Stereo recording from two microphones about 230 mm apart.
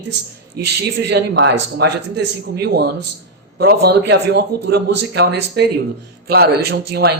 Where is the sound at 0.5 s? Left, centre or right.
Right.